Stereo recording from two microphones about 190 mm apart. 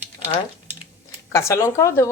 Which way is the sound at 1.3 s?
15° left (ahead or behind).